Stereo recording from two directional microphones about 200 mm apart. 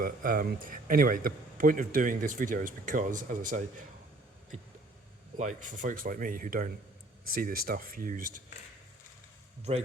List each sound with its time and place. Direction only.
0.0 s a man's voice: 45° right (ahead or behind)
5.4 s a man's voice: 40° right (ahead or behind)
9.7 s a man's voice: 35° right (ahead or behind)